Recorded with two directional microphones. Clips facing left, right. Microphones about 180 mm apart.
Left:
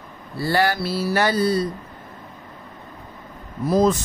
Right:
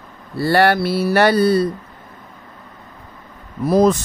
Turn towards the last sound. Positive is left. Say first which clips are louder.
# right 4 dB
turn(degrees=-65)  # may be behind; listen again after turning